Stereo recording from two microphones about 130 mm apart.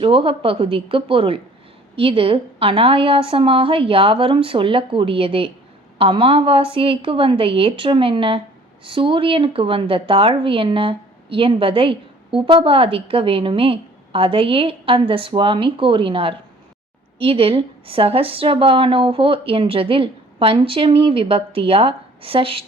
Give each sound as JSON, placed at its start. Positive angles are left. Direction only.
{"t": 0.0, "sound": "a woman's voice", "side_deg": -40}